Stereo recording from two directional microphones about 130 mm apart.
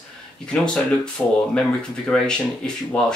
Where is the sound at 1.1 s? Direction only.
5° left (ahead or behind).